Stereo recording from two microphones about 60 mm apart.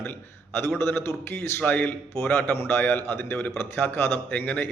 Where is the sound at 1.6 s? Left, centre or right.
Left.